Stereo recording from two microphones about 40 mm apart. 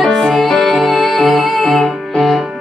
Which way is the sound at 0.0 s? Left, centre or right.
Centre.